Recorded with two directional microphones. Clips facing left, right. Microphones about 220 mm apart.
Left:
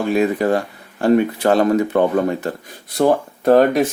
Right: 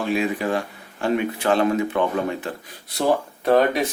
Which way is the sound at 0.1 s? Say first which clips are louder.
Left 6 dB; 40° left (ahead or behind).